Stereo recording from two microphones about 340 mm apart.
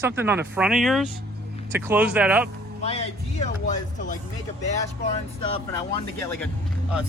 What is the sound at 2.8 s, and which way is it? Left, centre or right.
Speech, centre.